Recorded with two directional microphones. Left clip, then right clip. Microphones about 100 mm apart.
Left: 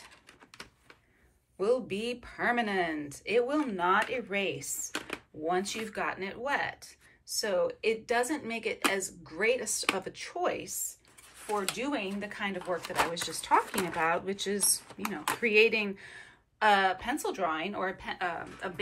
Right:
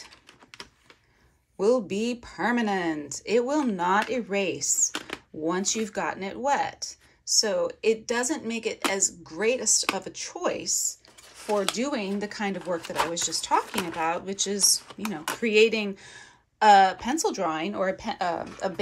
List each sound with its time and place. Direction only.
1.6 s speech: 45° right (ahead or behind)
4.9 s a sound: 15° right (ahead or behind)
5.5 s speech: 45° right (ahead or behind)
11.7 s speech: 65° right (ahead or behind)
13.3 s speech: 15° right (ahead or behind)
14.9 s speech: 5° right (ahead or behind)
15.4 s speech: 25° right (ahead or behind); by 18.7 s 55° right (ahead or behind)